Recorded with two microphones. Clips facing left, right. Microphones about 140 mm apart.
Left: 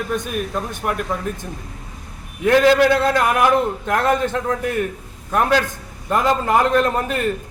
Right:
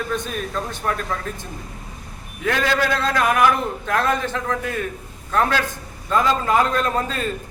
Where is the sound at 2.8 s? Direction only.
20° left (ahead or behind).